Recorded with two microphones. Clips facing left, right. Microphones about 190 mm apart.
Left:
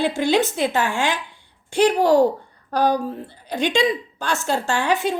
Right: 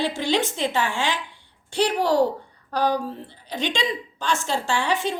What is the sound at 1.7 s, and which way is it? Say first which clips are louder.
Speech: left 5 dB; 45° left (ahead or behind).